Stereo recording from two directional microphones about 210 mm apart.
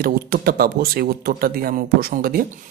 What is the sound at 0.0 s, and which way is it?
Speech, 45° right (ahead or behind).